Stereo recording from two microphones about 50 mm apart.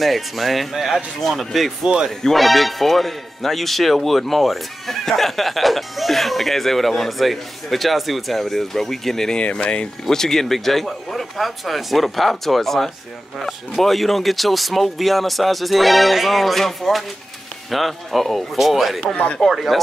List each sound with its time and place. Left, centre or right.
0.0 s speech: centre
9.4 s speech: left
10.0 s speech: centre
19.1 s speech: left
19.4 s speech: centre